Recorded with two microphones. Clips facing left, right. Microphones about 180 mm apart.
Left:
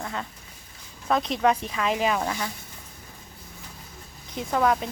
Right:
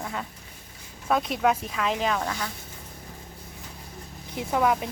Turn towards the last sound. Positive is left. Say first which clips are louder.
# left 1 dB
turn(degrees=-10)  # may be behind; listen again after turning